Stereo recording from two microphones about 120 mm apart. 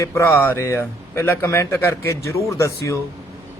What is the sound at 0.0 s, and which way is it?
A man's voice, 25° left (ahead or behind).